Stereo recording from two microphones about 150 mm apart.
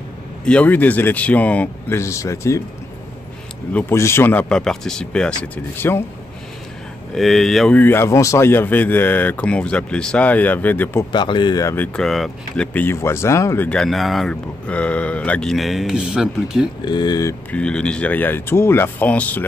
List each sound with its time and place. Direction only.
0.5 s speech: 10° left (ahead or behind)
3.7 s speech: 15° left (ahead or behind)
7.2 s speech: centre (ahead or behind)
11.1 s speech: 30° left (ahead or behind)
11.7 s speech: 10° left (ahead or behind)
12.7 s speech: 15° left (ahead or behind)
13.7 s speech: 5° left (ahead or behind)
16.8 s speech: 30° left (ahead or behind)
17.5 s speech: 5° left (ahead or behind)